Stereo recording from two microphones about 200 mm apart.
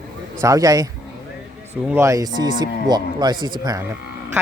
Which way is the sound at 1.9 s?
15° right (ahead or behind).